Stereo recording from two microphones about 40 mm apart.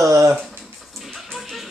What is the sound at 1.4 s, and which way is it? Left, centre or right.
Music, centre.